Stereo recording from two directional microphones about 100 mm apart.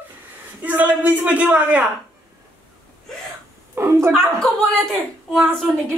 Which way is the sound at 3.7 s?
25° right (ahead or behind).